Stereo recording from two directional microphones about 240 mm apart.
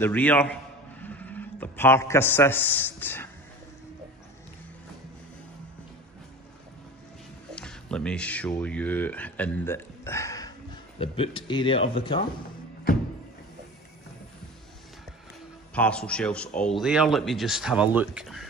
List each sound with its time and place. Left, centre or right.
0.0 s a man's voice: centre
7.5 s speech: centre; by 12.3 s left
15.7 s speech: centre